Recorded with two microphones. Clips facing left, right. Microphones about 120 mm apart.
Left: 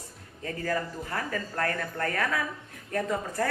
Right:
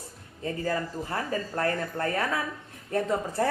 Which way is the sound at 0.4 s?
25° right (ahead or behind).